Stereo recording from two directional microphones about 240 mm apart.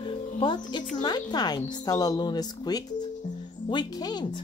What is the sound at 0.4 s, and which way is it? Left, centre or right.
A woman's voice, centre.